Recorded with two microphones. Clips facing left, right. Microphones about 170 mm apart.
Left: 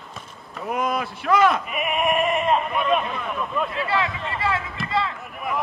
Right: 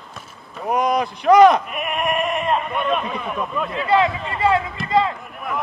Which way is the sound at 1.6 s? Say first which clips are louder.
Even; centre (ahead or behind).